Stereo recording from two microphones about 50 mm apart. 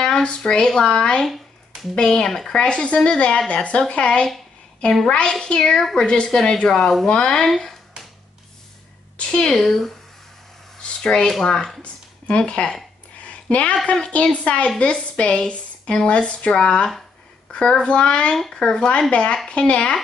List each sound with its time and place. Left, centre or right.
0.0 s a woman's voice: centre
2.5 s a woman's voice: left
5.9 s speech: centre
7.1 s speech: centre
7.4 s speech: centre
9.2 s speech: centre
10.8 s a sound: centre
11.4 s speech: centre
11.8 s a woman's voice: left
13.2 s a sound: left
13.9 s a woman's voice: centre